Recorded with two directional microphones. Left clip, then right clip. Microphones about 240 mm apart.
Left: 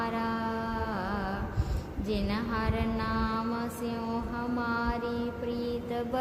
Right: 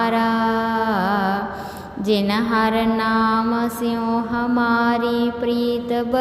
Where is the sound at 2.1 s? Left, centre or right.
Right.